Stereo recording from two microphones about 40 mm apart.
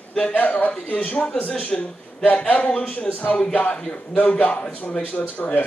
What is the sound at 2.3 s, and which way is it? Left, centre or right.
Speech, left.